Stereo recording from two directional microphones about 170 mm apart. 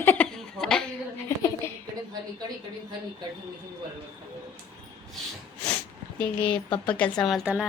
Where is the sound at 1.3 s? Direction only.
15° left (ahead or behind).